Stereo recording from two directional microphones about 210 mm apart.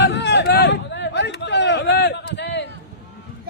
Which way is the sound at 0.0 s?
55° left (ahead or behind).